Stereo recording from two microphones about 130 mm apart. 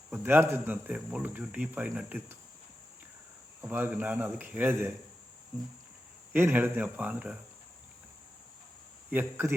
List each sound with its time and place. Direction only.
0.1 s a man's voice: 15° right (ahead or behind)
3.6 s a man's voice: 15° right (ahead or behind)
9.0 s a man's voice: 15° right (ahead or behind)